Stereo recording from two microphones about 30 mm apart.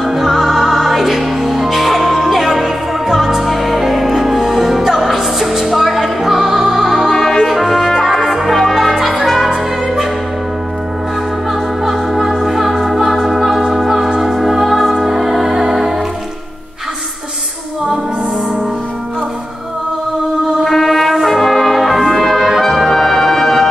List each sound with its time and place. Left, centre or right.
0.0 s music: centre
6.4 s music: right
6.8 s music: centre
7.2 s music: centre
7.4 s music: centre
8.8 s music: centre
9.2 s music: centre
11.8 s music: centre
20.6 s music: centre
21.2 s brass instrument: centre